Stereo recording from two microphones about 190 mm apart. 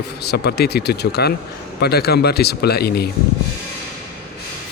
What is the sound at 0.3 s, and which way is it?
Speech, 60° left (ahead or behind).